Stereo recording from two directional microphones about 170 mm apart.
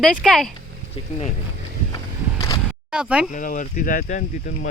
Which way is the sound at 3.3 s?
50° left (ahead or behind).